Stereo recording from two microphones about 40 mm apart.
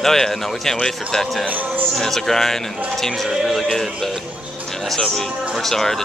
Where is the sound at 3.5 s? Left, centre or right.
Centre.